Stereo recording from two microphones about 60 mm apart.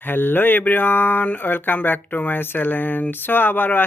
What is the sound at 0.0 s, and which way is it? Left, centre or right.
Speech, left.